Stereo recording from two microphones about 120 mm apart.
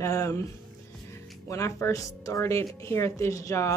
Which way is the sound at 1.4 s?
25° left (ahead or behind).